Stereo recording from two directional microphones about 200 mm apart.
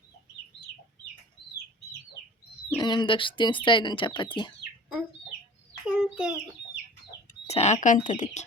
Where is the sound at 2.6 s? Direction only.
20° left (ahead or behind).